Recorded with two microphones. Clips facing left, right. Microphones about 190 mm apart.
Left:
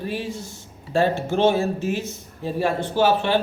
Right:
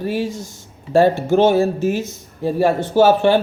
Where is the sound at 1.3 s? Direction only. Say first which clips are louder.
Right 5 dB; 45° right (ahead or behind).